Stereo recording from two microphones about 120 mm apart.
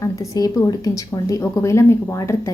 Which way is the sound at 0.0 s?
30° left (ahead or behind).